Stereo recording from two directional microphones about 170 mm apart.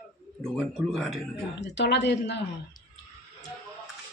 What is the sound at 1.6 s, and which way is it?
Speech, 90° left.